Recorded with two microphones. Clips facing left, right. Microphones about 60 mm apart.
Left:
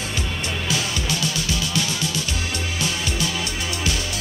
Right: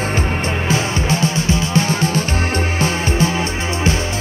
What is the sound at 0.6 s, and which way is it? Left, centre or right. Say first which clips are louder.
Music: right 7 dB; right.